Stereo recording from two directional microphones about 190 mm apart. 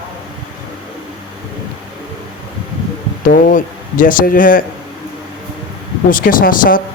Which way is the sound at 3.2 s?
45° left (ahead or behind).